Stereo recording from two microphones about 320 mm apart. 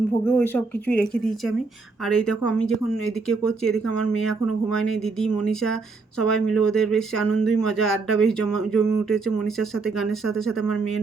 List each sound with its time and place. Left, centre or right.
0.3 s speech: centre
3.9 s speech: left
6.2 s speech: centre
7.2 s speech: left
8.4 s speech: centre